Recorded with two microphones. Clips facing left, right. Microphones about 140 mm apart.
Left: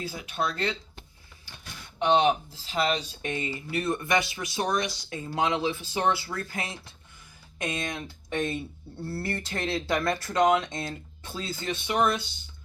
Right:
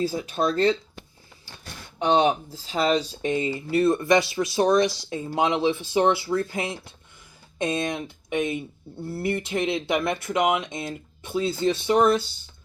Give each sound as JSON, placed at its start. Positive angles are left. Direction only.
{"t": 0.0, "sound": "speech", "side_deg": -40}
{"t": 3.2, "sound": "speech", "side_deg": -25}
{"t": 10.4, "sound": "speech", "side_deg": -10}